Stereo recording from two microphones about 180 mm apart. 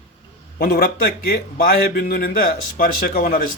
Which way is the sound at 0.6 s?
60° left (ahead or behind).